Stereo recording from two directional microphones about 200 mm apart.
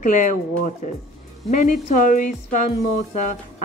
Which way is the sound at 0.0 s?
40° left (ahead or behind).